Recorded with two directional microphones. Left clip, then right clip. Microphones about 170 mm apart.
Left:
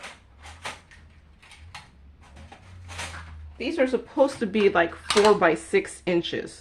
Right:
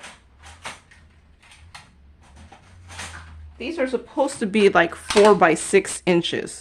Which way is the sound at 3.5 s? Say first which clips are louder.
Left 1 dB; 15° left (ahead or behind).